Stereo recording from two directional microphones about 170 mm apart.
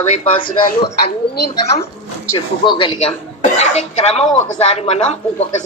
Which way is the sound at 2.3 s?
30° left (ahead or behind).